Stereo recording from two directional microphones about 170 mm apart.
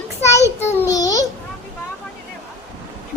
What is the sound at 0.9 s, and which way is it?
Babbling, 20° left (ahead or behind).